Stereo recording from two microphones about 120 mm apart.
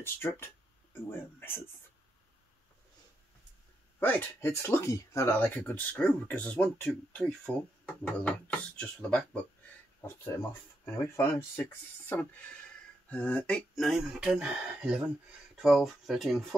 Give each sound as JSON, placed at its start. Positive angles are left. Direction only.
{"t": 0.0, "sound": "speech", "side_deg": 20}
{"t": 4.0, "sound": "speech", "side_deg": 15}
{"t": 10.0, "sound": "speech", "side_deg": 20}